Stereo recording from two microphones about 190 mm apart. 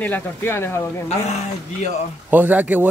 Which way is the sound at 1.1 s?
35° left (ahead or behind).